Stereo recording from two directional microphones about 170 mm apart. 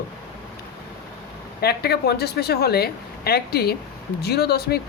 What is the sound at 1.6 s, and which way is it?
A woman's voice, 70° left (ahead or behind).